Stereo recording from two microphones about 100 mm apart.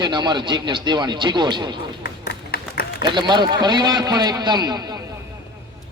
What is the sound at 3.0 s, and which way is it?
A man's voice, 50° right (ahead or behind).